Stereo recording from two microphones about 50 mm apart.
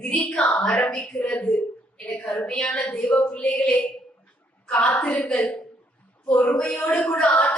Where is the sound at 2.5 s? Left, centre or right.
Left.